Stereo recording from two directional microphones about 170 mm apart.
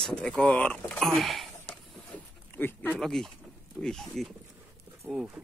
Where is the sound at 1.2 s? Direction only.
Centre (ahead or behind).